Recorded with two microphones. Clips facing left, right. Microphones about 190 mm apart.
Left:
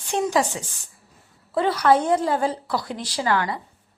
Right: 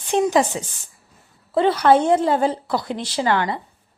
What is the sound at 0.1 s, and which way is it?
A woman's voice, 20° right (ahead or behind).